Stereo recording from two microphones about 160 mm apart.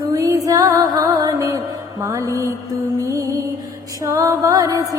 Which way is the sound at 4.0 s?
20° right (ahead or behind).